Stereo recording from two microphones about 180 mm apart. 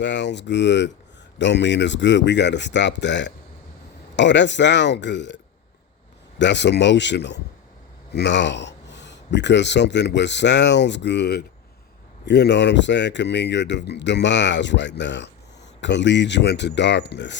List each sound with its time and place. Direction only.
0.0 s speech: 75° left (ahead or behind)
6.4 s speech: 75° left (ahead or behind)